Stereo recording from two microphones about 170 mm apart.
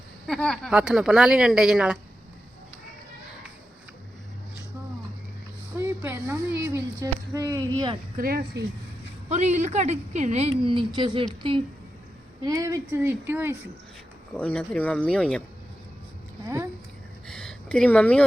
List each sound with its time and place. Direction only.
0.3 s speech: 5° left (ahead or behind)
5.7 s speech: 10° right (ahead or behind)
8.1 s speech: 60° right (ahead or behind)
9.3 s speech: 40° right (ahead or behind)
12.4 s speech: 20° right (ahead or behind)
14.3 s speech: 10° left (ahead or behind)
17.2 s a sound: 5° left (ahead or behind)